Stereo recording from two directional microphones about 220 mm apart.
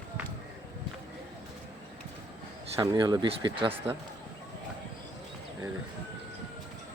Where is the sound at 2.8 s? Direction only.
20° right (ahead or behind).